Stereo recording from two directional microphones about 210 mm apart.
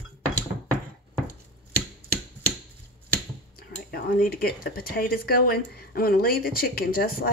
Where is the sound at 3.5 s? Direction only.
45° left (ahead or behind).